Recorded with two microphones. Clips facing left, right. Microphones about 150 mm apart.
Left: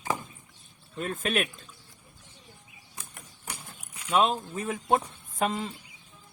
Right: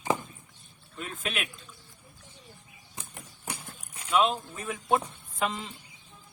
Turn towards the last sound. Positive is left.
turn(degrees=45)  # may be behind; listen again after turning